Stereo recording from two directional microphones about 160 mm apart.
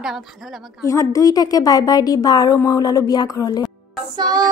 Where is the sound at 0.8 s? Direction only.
20° left (ahead or behind).